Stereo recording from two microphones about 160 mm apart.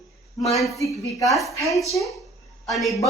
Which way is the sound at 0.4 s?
Centre (ahead or behind).